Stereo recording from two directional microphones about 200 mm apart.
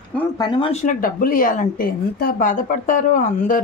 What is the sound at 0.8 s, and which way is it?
A woman's voice, 45° left (ahead or behind).